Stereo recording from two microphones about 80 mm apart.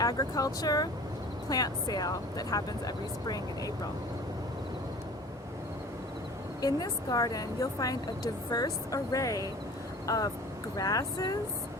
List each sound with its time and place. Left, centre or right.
0.0 s a woman's voice: left
6.6 s a woman's voice: left